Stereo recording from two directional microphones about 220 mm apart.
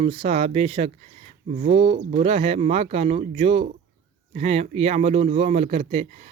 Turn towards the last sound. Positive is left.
turn(degrees=-30)  # may be behind; listen again after turning